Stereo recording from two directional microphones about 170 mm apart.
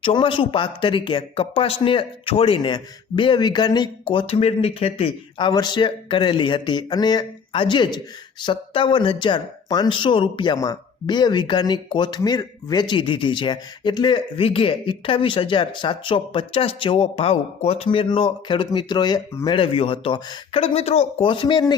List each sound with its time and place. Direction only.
0.0 s speech: 30° left (ahead or behind)
19.5 s speech: 30° left (ahead or behind)